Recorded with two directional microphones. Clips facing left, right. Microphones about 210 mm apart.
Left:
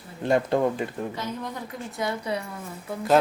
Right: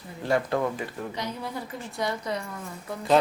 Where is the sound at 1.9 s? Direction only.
5° left (ahead or behind).